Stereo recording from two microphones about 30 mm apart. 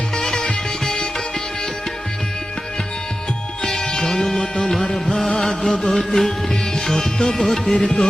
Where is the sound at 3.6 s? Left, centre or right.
Centre.